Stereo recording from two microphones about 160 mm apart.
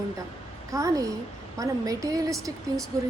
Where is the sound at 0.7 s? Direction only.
20° right (ahead or behind).